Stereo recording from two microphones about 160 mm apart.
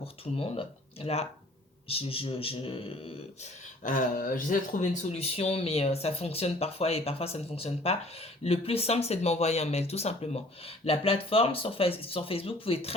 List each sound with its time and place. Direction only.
0.0 s speech: 35° left (ahead or behind)
3.8 s speech: 60° left (ahead or behind); by 12.9 s 35° left (ahead or behind)